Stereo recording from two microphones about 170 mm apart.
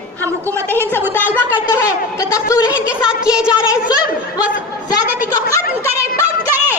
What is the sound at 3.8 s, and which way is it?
Speech, 20° left (ahead or behind).